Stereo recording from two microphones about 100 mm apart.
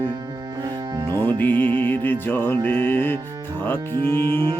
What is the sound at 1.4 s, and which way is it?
Music, 20° left (ahead or behind).